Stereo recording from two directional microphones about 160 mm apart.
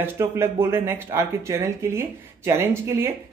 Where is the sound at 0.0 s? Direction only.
15° right (ahead or behind).